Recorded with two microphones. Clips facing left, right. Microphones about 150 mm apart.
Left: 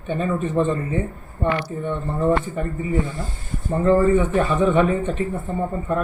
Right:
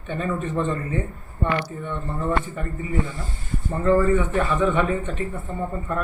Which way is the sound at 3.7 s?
25° left (ahead or behind).